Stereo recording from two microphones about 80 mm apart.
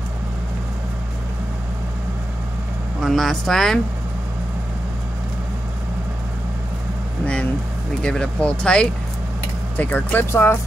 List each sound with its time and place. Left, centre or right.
3.0 s speech: centre
8.0 s speech: centre
9.8 s speech: left